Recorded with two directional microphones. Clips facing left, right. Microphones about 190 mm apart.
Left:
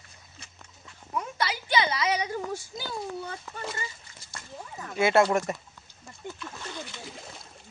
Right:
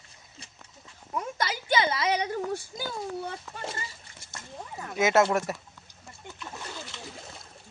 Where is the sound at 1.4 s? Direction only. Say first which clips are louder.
Even; 45° right (ahead or behind).